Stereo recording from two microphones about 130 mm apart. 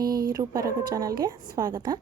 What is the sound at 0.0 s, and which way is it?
A woman's voice, 30° right (ahead or behind).